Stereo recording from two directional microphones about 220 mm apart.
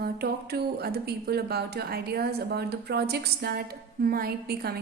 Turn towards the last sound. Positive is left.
turn(degrees=-45)  # may be behind; listen again after turning